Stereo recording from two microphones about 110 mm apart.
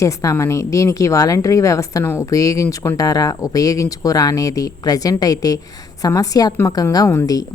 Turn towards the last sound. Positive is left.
turn(degrees=30)  # may be behind; listen again after turning